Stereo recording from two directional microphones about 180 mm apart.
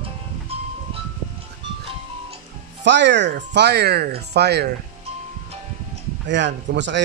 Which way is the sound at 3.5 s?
65° right (ahead or behind).